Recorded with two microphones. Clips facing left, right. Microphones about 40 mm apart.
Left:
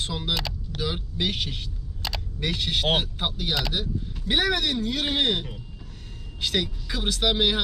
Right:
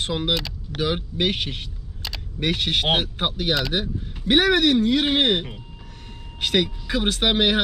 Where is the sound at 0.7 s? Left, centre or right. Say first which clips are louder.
Right 7 dB; right.